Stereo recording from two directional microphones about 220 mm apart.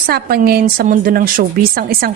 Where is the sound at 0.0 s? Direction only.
45° right (ahead or behind).